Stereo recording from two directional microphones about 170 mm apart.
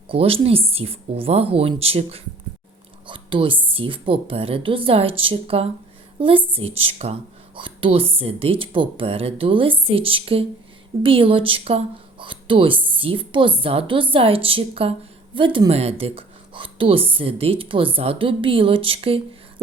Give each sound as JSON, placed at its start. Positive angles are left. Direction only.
{"t": 0.1, "sound": "a woman's voice", "side_deg": -35}